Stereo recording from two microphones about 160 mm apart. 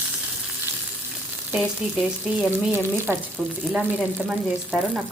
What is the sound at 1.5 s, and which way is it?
Speech, 5° right (ahead or behind).